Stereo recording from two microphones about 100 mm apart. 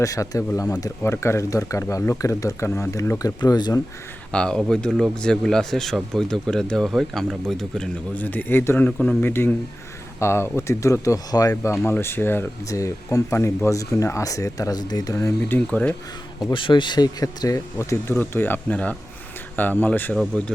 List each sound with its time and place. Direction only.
0.0 s speech: 35° left (ahead or behind)
1.0 s speech: 25° left (ahead or behind)
2.6 s speech: 20° left (ahead or behind); by 3.8 s 45° left (ahead or behind)
4.3 s speech: 10° left (ahead or behind)
8.1 s speech: 15° left (ahead or behind)
12.6 s speech: 35° left (ahead or behind)
15.4 s speech: 15° left (ahead or behind)
16.4 s speech: 55° left (ahead or behind); by 20.1 s 20° left (ahead or behind)